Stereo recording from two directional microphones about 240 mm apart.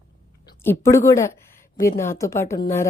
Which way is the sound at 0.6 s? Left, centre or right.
Centre.